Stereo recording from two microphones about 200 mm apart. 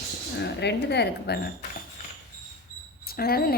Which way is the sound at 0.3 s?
55° left (ahead or behind).